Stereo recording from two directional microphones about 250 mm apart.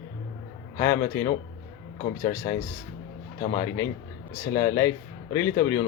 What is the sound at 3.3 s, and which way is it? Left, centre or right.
Speech, left.